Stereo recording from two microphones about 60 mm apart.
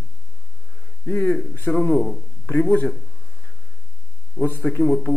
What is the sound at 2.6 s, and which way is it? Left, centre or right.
Speech, left.